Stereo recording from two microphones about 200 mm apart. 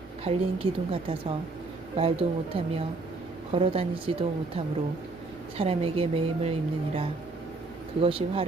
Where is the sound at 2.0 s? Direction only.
30° right (ahead or behind).